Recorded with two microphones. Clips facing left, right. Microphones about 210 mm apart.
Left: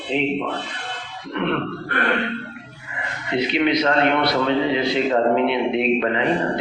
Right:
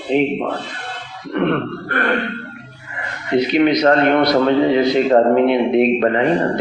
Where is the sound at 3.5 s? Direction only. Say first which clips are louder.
Right 5 dB; 45° right (ahead or behind).